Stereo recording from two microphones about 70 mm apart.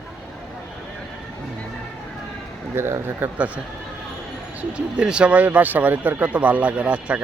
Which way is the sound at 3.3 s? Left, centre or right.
Centre.